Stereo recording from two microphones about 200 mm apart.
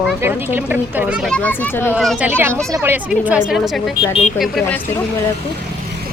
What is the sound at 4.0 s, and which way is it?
Speech, 30° left (ahead or behind).